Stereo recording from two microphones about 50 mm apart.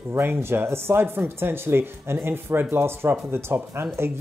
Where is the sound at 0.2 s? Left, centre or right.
Right.